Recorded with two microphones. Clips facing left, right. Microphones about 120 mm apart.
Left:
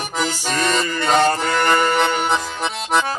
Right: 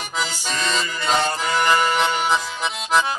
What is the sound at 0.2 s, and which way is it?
Music, 55° left (ahead or behind).